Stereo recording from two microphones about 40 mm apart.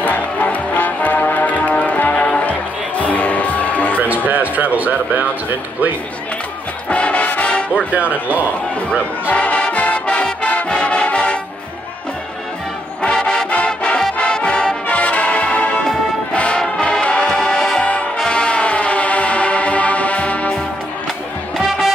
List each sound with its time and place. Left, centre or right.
0.0 s music: left
4.3 s speech: right
6.9 s music: left
7.9 s speech: right
9.3 s music: left
13.0 s music: left
14.9 s music: left
16.5 s brass instrument: centre
16.8 s music: left
17.4 s music: centre
17.7 s music: left